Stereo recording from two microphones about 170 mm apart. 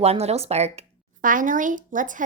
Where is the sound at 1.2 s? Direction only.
50° right (ahead or behind).